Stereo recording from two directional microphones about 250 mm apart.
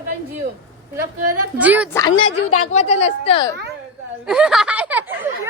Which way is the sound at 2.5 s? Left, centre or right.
Left.